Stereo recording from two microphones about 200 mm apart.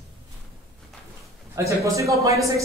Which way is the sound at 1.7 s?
15° right (ahead or behind).